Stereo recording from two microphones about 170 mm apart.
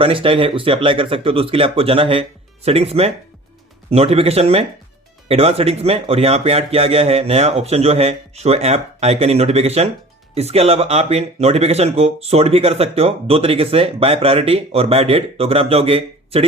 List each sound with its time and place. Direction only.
0.0 s speech: 30° right (ahead or behind)